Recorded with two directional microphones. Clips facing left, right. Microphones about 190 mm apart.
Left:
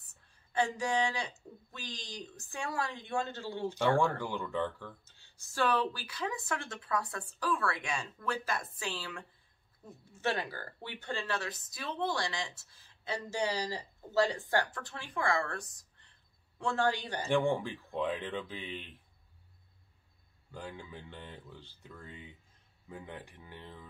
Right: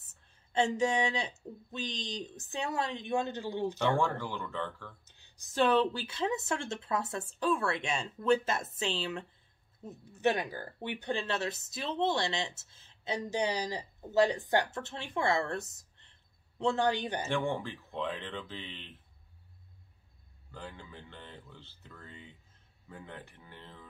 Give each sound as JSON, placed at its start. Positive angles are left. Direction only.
{"t": 0.0, "sound": "speech", "side_deg": -25}
{"t": 4.0, "sound": "speech", "side_deg": 15}
{"t": 5.0, "sound": "speech", "side_deg": -20}
{"t": 17.3, "sound": "speech", "side_deg": 15}
{"t": 20.5, "sound": "speech", "side_deg": 15}